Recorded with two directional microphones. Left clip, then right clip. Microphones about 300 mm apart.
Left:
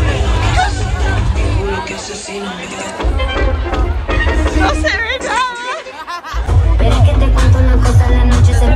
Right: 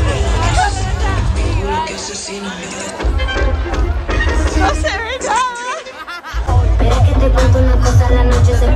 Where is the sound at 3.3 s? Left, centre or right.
Centre.